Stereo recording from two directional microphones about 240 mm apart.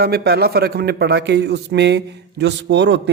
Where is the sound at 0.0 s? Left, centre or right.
Right.